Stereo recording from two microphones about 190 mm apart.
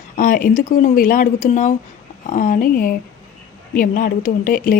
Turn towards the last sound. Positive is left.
turn(degrees=45)  # may be behind; listen again after turning